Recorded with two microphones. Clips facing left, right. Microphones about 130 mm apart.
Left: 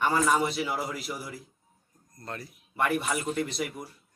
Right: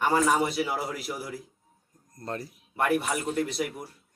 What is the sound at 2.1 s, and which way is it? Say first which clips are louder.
Speech: right 5 dB; 35° right (ahead or behind).